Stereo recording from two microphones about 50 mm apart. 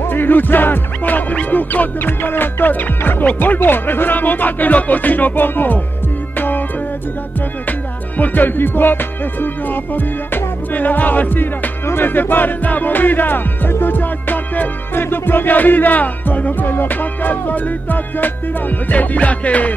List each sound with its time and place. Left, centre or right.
0.0 s music: left
3.0 s speech: left
3.3 s music: left
8.2 s music: left